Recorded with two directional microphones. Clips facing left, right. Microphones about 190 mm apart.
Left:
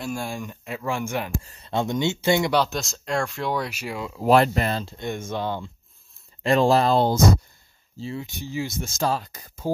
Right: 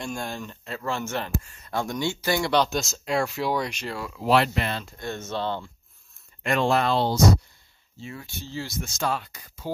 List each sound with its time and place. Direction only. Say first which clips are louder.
0.0 s speech: left 2 dB; 10° left (ahead or behind)
1.4 s speech: left 4 dB; 30° left (ahead or behind)
2.5 s speech: even; centre (ahead or behind)
4.2 s speech: left 4 dB; 45° left (ahead or behind)
4.8 s speech: left 3 dB; 20° left (ahead or behind)
6.4 s speech: left 4 dB; 35° left (ahead or behind)
8.0 s speech: left 6 dB; 25° left (ahead or behind)
9.0 s speech: left 3 dB; 35° left (ahead or behind)